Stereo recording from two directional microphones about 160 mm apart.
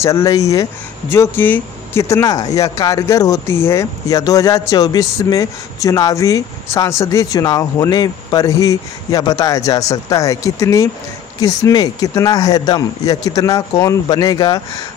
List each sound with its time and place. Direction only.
0.0 s speech: 20° left (ahead or behind)